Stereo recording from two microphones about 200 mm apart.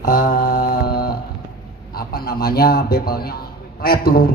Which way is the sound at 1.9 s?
50° left (ahead or behind).